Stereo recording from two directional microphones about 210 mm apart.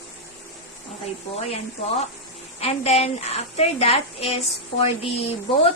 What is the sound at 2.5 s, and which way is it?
A woman's voice, 30° left (ahead or behind).